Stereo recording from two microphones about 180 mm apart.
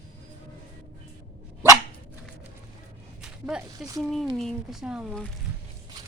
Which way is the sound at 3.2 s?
5° right (ahead or behind).